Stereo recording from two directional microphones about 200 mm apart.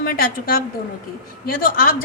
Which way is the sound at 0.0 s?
45° left (ahead or behind).